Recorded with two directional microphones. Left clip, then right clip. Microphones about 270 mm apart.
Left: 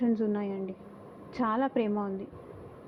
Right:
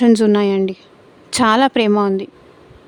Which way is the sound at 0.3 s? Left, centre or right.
Right.